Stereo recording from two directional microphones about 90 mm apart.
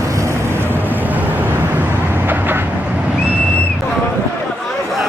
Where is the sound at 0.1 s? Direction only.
35° right (ahead or behind).